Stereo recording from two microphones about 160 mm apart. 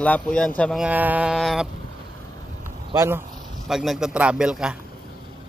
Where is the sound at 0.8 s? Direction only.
10° right (ahead or behind).